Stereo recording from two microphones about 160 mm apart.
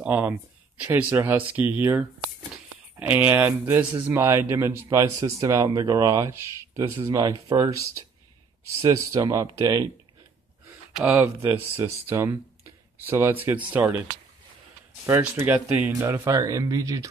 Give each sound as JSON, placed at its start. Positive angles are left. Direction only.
{"t": 0.0, "sound": "speech", "side_deg": -10}
{"t": 11.1, "sound": "speech", "side_deg": -15}
{"t": 15.0, "sound": "speech", "side_deg": -15}